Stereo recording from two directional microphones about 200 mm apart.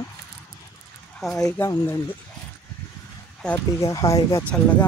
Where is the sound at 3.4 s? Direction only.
10° left (ahead or behind).